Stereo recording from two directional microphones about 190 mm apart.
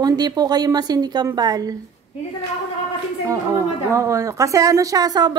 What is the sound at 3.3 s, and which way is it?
A woman's voice, 15° right (ahead or behind).